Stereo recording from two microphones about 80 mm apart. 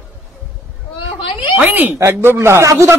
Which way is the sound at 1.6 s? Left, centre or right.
Right.